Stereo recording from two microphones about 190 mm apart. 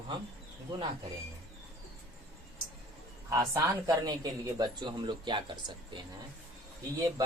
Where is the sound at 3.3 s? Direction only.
15° right (ahead or behind).